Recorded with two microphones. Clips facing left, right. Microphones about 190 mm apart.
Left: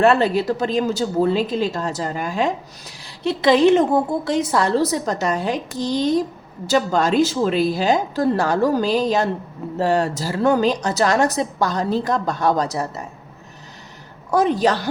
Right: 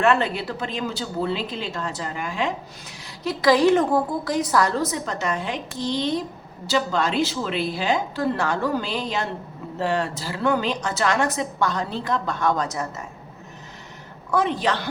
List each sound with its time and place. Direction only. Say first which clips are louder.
0.0 s speech: left 5 dB; 35° left (ahead or behind)
14.3 s speech: left 5 dB; 40° left (ahead or behind)